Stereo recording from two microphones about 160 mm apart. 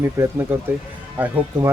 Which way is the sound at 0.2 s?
20° right (ahead or behind).